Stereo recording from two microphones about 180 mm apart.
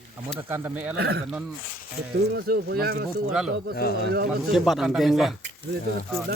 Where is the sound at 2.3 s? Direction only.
60° right (ahead or behind).